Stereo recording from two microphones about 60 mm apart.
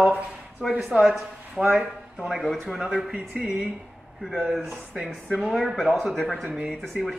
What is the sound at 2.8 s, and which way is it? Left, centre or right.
Speech, centre.